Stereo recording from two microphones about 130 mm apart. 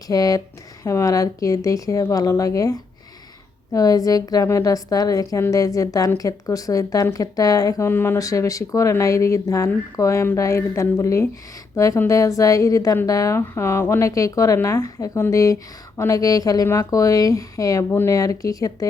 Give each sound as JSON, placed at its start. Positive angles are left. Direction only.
{"t": 0.1, "sound": "speech", "side_deg": 30}